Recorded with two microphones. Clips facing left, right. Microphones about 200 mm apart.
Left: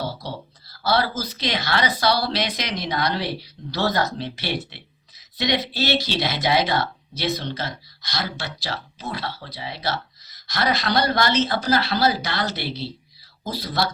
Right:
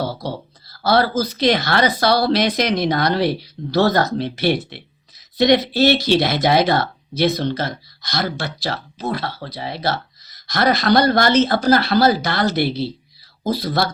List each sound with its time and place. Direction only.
0.8 s speech: 50° right (ahead or behind)